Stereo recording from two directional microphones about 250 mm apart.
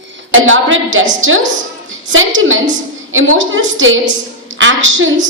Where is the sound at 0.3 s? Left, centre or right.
Right.